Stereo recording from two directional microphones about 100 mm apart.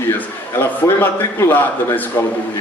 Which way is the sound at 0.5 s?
20° left (ahead or behind).